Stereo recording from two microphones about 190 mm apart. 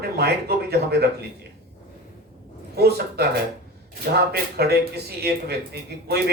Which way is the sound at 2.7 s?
55° right (ahead or behind).